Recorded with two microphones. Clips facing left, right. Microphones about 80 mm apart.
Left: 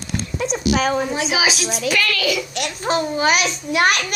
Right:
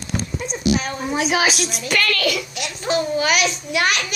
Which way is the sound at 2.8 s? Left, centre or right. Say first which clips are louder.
Left 1 dB; left.